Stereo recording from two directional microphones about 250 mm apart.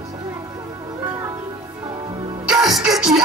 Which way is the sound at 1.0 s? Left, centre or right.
Centre.